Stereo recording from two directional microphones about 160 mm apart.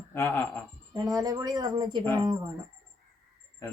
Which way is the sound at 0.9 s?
20° right (ahead or behind).